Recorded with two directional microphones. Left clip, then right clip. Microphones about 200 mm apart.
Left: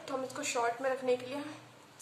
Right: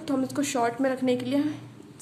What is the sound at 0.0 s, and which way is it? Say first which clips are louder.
A woman's voice: right 9 dB; 35° right (ahead or behind).